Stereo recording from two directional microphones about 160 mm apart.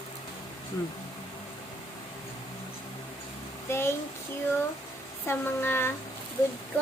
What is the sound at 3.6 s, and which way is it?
Speech, 15° left (ahead or behind).